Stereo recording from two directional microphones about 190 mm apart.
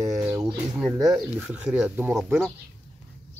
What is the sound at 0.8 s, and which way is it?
Speech, centre (ahead or behind).